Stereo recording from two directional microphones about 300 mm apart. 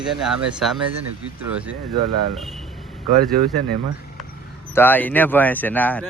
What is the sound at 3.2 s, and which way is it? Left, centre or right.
Speech, right.